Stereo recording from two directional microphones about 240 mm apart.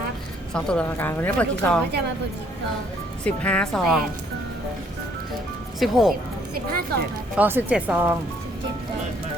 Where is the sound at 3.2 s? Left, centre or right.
Centre.